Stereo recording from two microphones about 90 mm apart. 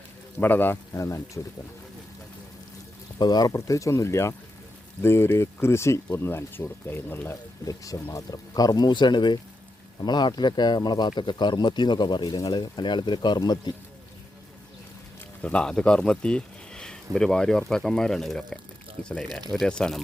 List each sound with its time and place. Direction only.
0.3 s speech: 20° left (ahead or behind)
0.9 s speech: 35° left (ahead or behind)
3.2 s speech: 45° left (ahead or behind); by 7.3 s 25° left (ahead or behind)
7.6 s speech: 40° left (ahead or behind)
15.4 s speech: 15° left (ahead or behind)